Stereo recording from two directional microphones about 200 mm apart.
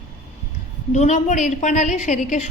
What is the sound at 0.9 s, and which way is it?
A woman's voice, 35° left (ahead or behind).